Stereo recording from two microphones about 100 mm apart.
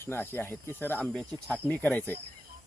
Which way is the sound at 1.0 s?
5° left (ahead or behind).